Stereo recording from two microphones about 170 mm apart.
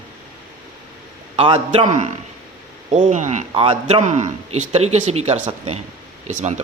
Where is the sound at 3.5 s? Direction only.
35° right (ahead or behind).